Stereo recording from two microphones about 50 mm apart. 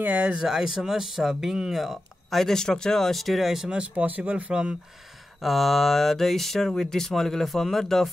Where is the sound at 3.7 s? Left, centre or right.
Right.